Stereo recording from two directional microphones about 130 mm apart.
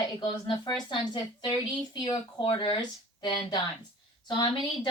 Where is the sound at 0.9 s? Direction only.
35° left (ahead or behind).